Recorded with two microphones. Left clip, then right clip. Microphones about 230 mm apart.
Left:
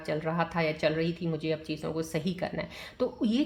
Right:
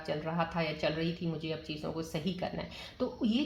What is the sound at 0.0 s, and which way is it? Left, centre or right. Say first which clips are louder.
Speech: left 4 dB; left.